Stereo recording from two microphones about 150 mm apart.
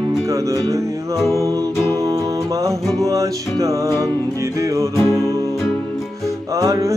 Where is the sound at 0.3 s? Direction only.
20° right (ahead or behind).